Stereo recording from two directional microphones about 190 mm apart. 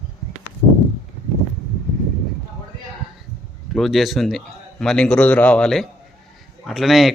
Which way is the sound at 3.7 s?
Centre (ahead or behind).